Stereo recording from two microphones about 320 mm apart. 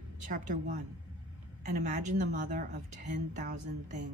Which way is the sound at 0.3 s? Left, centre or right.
Right.